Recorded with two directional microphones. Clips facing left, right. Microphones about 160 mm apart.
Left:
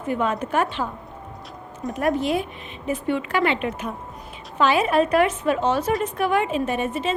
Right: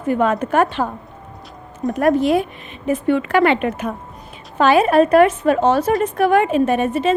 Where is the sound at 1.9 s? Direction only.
50° right (ahead or behind).